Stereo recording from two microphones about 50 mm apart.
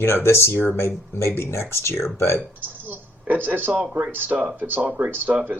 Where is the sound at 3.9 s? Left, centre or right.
Right.